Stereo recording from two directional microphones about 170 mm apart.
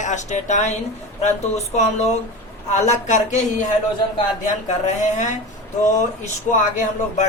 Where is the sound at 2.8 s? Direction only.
45° left (ahead or behind).